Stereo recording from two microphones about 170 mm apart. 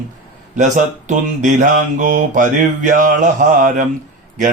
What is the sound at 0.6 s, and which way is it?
Mantra, 45° right (ahead or behind).